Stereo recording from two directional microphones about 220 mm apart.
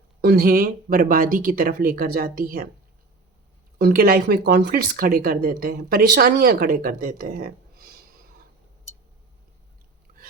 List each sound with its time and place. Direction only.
0.2 s speech: 45° right (ahead or behind)
3.8 s speech: 45° right (ahead or behind)